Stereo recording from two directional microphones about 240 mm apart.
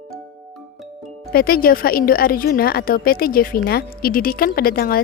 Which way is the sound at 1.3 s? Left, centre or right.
Left.